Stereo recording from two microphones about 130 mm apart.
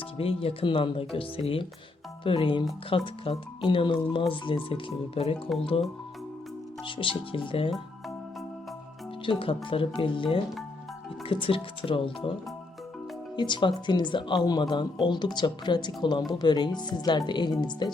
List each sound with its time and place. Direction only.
0.2 s speech: 45° left (ahead or behind)
6.8 s speech: 40° left (ahead or behind)
9.2 s speech: 40° left (ahead or behind)
13.3 s speech: 35° left (ahead or behind)